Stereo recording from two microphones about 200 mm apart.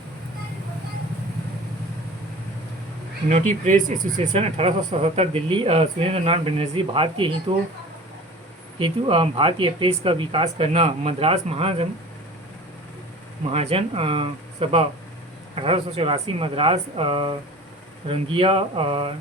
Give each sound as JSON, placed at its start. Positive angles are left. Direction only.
{"t": 3.2, "sound": "speech", "side_deg": -35}
{"t": 8.8, "sound": "speech", "side_deg": -25}
{"t": 13.5, "sound": "speech", "side_deg": -30}